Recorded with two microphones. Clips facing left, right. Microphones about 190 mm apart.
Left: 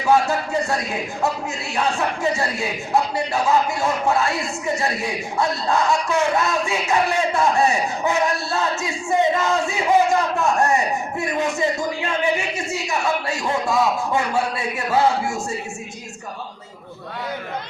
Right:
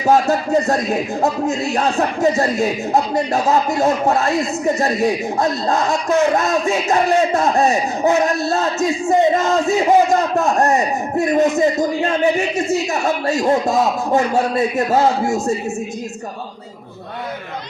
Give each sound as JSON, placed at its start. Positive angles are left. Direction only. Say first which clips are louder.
{"t": 0.0, "sound": "speech", "louder": "right 3 dB", "side_deg": -40}